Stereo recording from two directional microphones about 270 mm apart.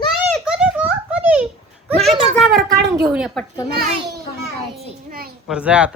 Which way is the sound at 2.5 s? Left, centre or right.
Right.